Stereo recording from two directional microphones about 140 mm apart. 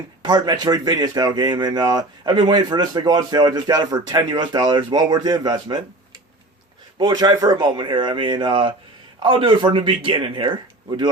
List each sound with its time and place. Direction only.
0.2 s speech: 30° right (ahead or behind)
7.0 s speech: 30° right (ahead or behind)